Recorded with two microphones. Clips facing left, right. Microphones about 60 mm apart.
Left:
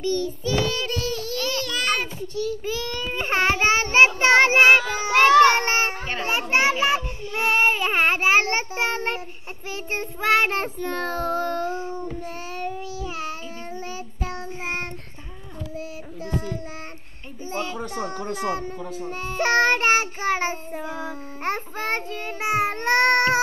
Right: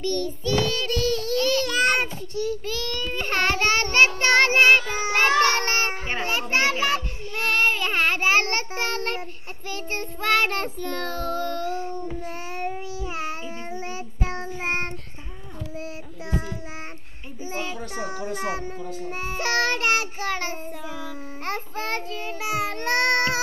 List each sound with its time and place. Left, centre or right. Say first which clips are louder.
0.0 s child singing: left 1 dB; centre
1.7 s a sound: right 3 dB; right
2.6 s child singing: left 1 dB; centre
5.4 s a sound: left 5 dB; centre
8.7 s child singing: left 2 dB; centre
12.2 s child singing: even; right
17.5 s a sound: left 3 dB; centre
18.3 s speech: left 2 dB; centre
19.4 s child singing: left 5 dB; left